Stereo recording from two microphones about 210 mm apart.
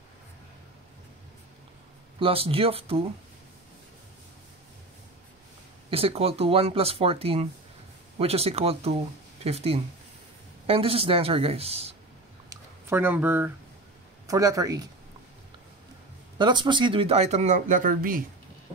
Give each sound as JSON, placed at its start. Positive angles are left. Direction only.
{"t": 2.1, "sound": "speech", "side_deg": -25}
{"t": 5.9, "sound": "speech", "side_deg": -25}
{"t": 12.4, "sound": "a sound", "side_deg": -10}
{"t": 14.2, "sound": "speech", "side_deg": -15}
{"t": 16.3, "sound": "speech", "side_deg": -20}